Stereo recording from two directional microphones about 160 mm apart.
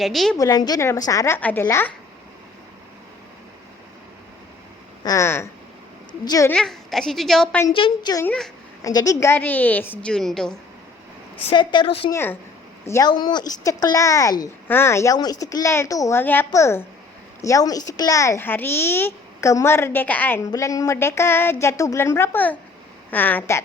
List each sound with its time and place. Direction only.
0.0 s a woman's voice: centre (ahead or behind)
0.3 s speech: 20° left (ahead or behind)
5.0 s speech: 15° left (ahead or behind)
6.5 s a woman's voice: 5° left (ahead or behind)
7.7 s a woman's voice: 30° left (ahead or behind)
8.2 s speech: 5° left (ahead or behind)
8.8 s speech: 25° left (ahead or behind); by 10.6 s 5° left (ahead or behind)
11.5 s speech: 30° left (ahead or behind)
12.1 s speech: 15° left (ahead or behind)
13.1 s speech: 25° left (ahead or behind)